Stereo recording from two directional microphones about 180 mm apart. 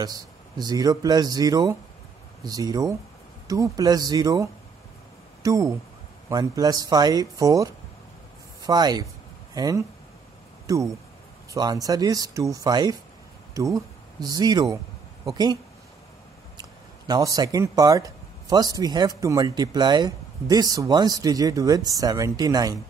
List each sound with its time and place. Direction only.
0.0 s speech: 20° right (ahead or behind)
17.1 s speech: 20° right (ahead or behind)